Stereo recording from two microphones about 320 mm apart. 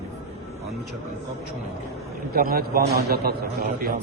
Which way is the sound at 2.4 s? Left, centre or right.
Right.